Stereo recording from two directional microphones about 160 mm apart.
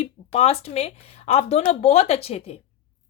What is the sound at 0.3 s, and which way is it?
Speech, 40° left (ahead or behind).